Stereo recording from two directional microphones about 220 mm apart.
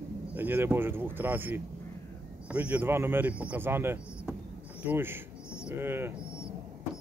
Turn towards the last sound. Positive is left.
turn(degrees=-10)  # may be behind; listen again after turning